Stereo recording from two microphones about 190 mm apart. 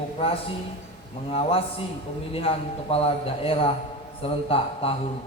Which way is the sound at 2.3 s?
30° left (ahead or behind).